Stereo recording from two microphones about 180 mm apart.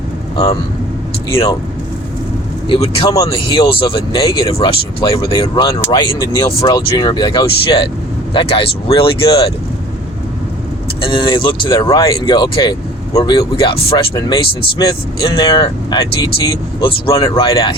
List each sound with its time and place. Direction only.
2.6 s speech: 30° left (ahead or behind)
11.0 s speech: 25° left (ahead or behind)